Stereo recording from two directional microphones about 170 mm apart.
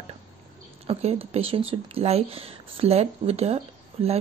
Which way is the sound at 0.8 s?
35° right (ahead or behind).